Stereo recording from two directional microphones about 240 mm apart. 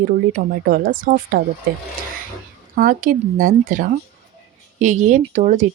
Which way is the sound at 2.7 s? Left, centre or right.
Right.